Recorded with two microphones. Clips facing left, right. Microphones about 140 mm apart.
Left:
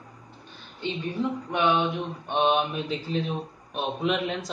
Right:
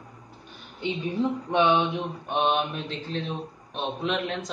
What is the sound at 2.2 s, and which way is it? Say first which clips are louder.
Speech: left 2 dB; centre (ahead or behind).